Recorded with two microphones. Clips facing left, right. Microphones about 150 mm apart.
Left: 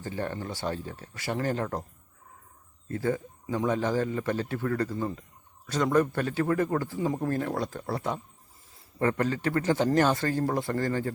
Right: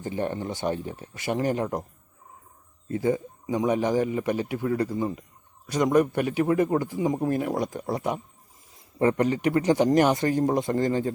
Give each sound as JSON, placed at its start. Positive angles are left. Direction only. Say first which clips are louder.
{"t": 0.0, "sound": "speech", "louder": "right 4 dB", "side_deg": -20}
{"t": 2.9, "sound": "a man's voice", "louder": "right 4 dB", "side_deg": -15}